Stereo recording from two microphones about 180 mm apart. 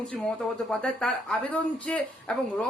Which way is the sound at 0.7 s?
5° left (ahead or behind).